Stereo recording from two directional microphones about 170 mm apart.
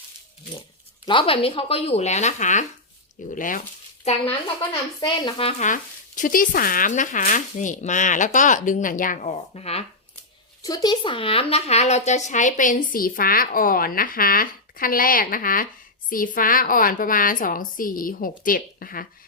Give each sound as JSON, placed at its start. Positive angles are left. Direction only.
{"t": 1.0, "sound": "speech", "side_deg": 30}
{"t": 4.0, "sound": "speech", "side_deg": 40}
{"t": 4.9, "sound": "speech", "side_deg": 25}
{"t": 10.6, "sound": "a woman's voice", "side_deg": 20}